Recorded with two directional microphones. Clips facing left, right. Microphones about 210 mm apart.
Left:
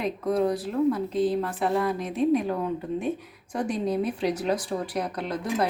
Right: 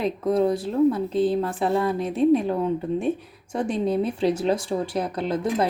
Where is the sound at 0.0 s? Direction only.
25° right (ahead or behind).